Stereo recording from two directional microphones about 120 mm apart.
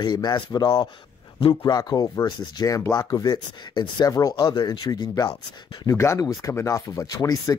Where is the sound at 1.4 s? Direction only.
45° left (ahead or behind); by 7.5 s 30° left (ahead or behind).